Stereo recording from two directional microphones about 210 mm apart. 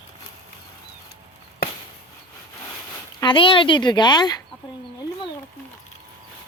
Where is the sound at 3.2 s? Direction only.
25° left (ahead or behind).